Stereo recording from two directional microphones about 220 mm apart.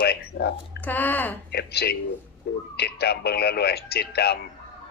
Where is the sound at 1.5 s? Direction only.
45° left (ahead or behind).